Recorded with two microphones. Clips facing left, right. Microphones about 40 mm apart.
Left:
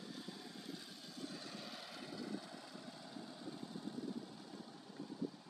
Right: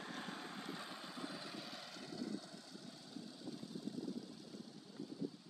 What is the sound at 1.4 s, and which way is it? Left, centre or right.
Vehicle, centre.